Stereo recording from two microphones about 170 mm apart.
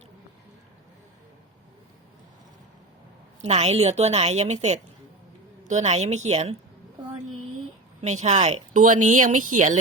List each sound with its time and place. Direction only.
3.4 s a woman's voice: 40° right (ahead or behind)
8.0 s speech: 45° right (ahead or behind)